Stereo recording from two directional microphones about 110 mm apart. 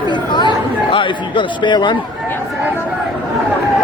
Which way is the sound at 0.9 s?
50° left (ahead or behind).